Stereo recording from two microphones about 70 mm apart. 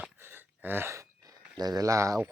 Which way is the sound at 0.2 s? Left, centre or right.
Right.